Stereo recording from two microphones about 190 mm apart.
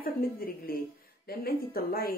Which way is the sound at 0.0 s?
50° left (ahead or behind).